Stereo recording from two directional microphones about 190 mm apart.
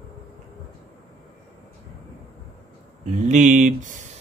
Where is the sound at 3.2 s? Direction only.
40° right (ahead or behind).